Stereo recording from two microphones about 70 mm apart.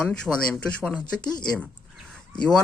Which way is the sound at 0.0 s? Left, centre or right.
Centre.